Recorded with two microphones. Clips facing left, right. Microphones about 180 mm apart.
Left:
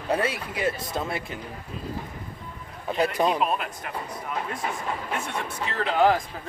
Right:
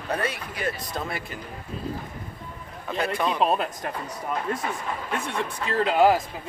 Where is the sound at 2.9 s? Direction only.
35° left (ahead or behind).